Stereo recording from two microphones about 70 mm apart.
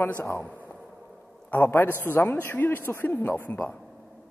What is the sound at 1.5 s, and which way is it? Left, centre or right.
A man's voice, left.